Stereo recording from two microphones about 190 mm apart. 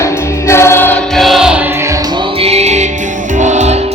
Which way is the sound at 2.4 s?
35° right (ahead or behind).